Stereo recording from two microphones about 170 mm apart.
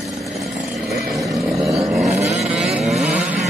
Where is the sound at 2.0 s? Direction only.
40° right (ahead or behind).